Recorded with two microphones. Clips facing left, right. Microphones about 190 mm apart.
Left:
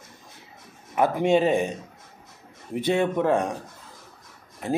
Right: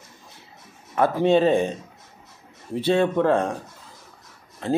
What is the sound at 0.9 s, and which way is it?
Speech, 15° left (ahead or behind).